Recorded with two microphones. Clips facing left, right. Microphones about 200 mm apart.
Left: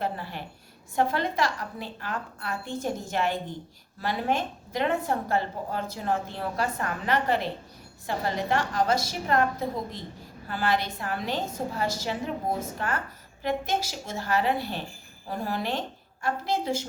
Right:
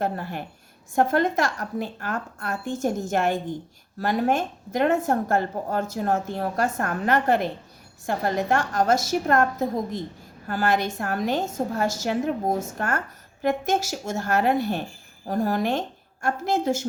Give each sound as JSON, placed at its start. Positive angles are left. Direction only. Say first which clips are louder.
{"t": 0.0, "sound": "a woman's voice", "louder": "right 4 dB", "side_deg": -45}